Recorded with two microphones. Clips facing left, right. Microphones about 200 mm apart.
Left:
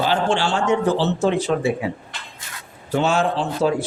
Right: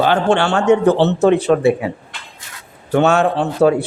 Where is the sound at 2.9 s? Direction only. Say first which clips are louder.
Right 5 dB; 65° right (ahead or behind).